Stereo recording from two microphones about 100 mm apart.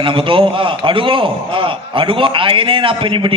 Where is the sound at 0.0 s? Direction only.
60° right (ahead or behind).